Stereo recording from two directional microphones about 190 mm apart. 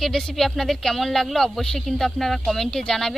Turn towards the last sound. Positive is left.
turn(degrees=5)  # may be behind; listen again after turning